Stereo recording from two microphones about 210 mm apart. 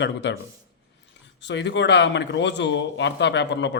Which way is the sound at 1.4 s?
55° left (ahead or behind).